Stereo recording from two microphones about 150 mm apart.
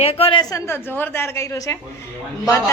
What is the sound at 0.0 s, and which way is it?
Speech, 40° left (ahead or behind).